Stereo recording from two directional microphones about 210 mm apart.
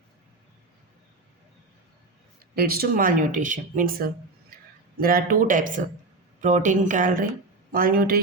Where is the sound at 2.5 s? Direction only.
45° right (ahead or behind).